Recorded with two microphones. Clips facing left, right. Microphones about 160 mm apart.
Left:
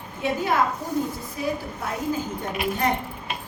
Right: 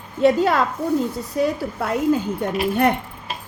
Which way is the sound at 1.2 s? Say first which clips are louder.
Right 7 dB; 75° right (ahead or behind).